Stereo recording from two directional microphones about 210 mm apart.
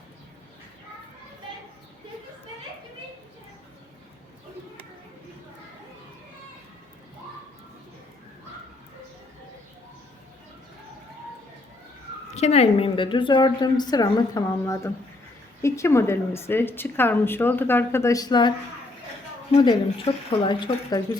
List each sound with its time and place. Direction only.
12.3 s a woman's voice: 30° left (ahead or behind)